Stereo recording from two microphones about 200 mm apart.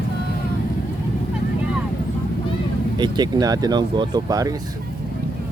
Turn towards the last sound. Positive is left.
turn(degrees=-15)  # may be behind; listen again after turning